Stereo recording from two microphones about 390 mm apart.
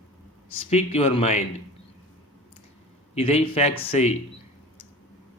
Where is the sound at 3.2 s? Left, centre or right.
Centre.